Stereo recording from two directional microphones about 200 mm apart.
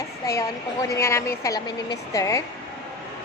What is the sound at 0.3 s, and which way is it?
A woman's voice, 15° left (ahead or behind).